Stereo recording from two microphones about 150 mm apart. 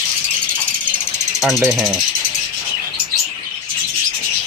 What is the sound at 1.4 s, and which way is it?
Speech, centre (ahead or behind).